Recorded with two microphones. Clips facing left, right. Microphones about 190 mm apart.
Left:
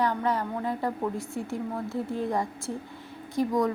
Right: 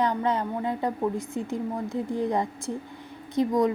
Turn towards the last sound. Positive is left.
turn(degrees=-20)  # may be behind; listen again after turning